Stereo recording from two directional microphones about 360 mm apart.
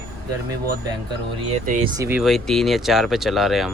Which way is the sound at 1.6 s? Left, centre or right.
Right.